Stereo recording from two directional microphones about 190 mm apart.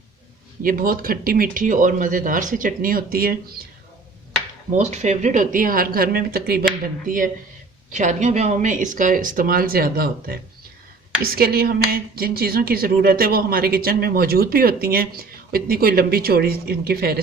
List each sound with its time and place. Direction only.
0.6 s a woman's voice: 50° right (ahead or behind)
4.8 s a woman's voice: 35° right (ahead or behind); by 6.7 s 55° right (ahead or behind)
7.9 s a woman's voice: 40° right (ahead or behind); by 17.2 s 55° right (ahead or behind)